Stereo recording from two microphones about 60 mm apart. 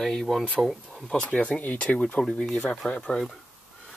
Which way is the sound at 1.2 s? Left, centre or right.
Left.